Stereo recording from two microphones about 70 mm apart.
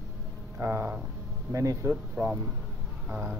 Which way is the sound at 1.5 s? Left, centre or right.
Right.